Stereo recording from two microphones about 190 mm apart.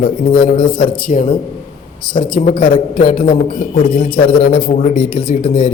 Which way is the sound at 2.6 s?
45° left (ahead or behind).